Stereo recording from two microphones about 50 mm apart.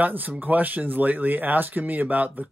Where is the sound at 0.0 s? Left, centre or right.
Right.